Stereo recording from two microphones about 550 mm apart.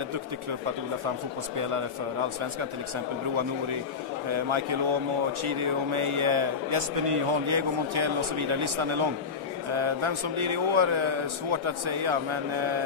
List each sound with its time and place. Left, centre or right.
1.6 s a man's voice: right
3.3 s a man's voice: right